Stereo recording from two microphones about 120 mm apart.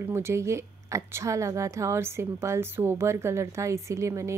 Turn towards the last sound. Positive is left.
turn(degrees=-25)  # may be behind; listen again after turning